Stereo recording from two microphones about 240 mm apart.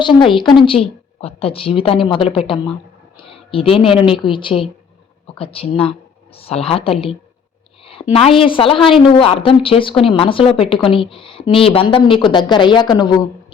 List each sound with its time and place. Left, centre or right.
0.0 s speech: centre
8.1 s speech: left